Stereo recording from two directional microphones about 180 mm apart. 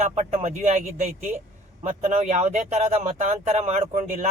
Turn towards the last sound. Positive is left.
turn(degrees=-40)  # may be behind; listen again after turning